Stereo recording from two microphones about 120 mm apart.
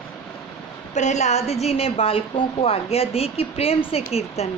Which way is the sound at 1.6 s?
55° left (ahead or behind).